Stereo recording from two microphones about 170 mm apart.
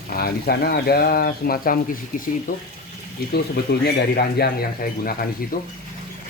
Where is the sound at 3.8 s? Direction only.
65° left (ahead or behind).